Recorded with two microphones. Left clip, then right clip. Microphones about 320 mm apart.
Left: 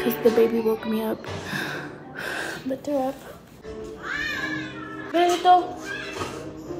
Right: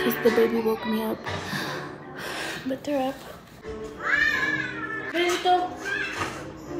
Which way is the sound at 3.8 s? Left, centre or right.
Centre.